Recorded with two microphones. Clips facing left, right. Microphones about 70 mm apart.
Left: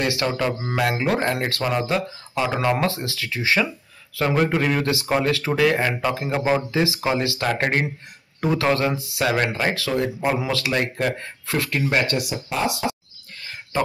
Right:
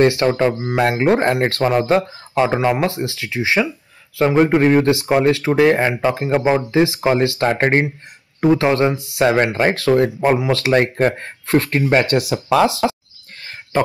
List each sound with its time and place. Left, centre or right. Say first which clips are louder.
0.0 s speech: right 8 dB; right
12.2 s speech: right 10 dB; right
13.4 s cricket: right 5 dB; right